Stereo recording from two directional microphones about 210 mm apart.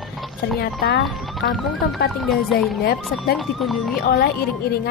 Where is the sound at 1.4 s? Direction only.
45° left (ahead or behind).